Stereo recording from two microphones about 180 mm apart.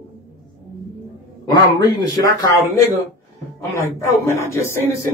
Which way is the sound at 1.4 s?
20° left (ahead or behind).